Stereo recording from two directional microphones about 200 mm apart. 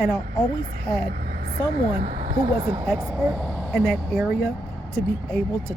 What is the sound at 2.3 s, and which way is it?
Speech, 20° right (ahead or behind).